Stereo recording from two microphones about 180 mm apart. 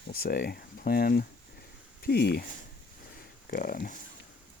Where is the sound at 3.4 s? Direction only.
50° left (ahead or behind).